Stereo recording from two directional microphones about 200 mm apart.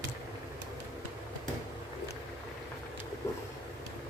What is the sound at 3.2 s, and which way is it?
Vehicle, 15° left (ahead or behind).